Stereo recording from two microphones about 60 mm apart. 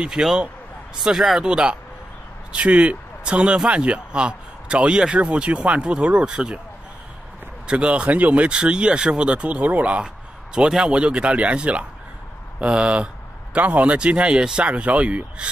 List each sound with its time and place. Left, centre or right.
0.0 s speech: centre
7.6 s speech: centre